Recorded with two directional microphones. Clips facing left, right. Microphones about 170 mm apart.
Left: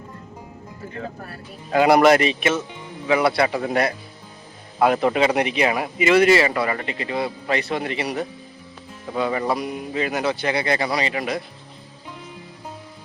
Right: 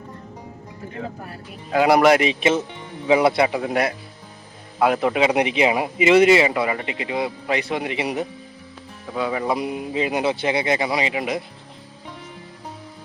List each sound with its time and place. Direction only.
1.7 s speech: 5° right (ahead or behind)
3.6 s speech: 5° right (ahead or behind)
9.1 s music: 5° right (ahead or behind)
9.6 s speech: 20° right (ahead or behind)